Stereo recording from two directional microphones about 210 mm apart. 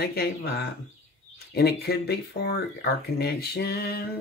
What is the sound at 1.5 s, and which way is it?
Speech, 50° left (ahead or behind).